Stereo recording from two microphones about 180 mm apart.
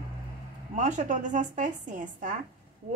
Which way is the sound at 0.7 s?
40° right (ahead or behind).